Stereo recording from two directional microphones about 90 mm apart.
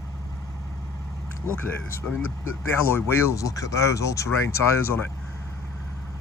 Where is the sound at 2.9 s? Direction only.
30° left (ahead or behind).